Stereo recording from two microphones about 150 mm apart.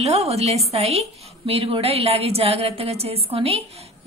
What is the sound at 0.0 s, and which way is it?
A woman's voice, 45° right (ahead or behind).